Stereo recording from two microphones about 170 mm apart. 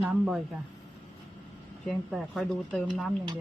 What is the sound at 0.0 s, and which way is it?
Speech, 5° right (ahead or behind).